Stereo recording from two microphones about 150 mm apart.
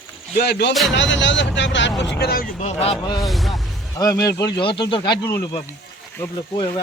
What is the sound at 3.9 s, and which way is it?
Speech, 25° left (ahead or behind).